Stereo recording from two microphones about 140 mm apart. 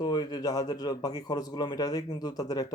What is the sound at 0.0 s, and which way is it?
Speech, 30° left (ahead or behind).